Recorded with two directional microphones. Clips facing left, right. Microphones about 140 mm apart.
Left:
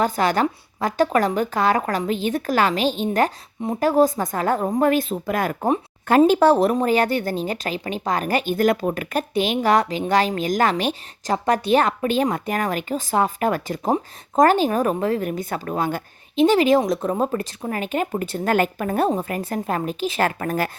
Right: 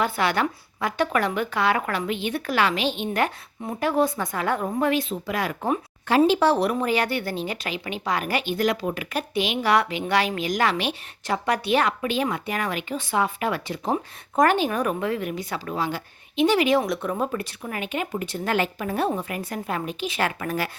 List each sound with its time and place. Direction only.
0.0 s a woman's voice: 40° left (ahead or behind)
6.1 s a woman's voice: 50° left (ahead or behind)